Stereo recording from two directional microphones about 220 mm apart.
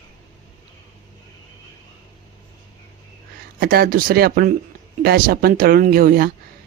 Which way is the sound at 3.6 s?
45° right (ahead or behind).